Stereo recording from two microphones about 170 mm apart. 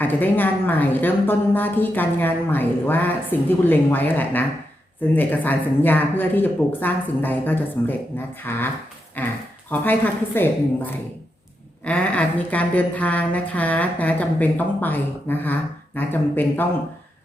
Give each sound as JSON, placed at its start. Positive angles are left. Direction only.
{"t": 0.0, "sound": "a woman's voice", "side_deg": 10}
{"t": 11.9, "sound": "a woman's voice", "side_deg": 5}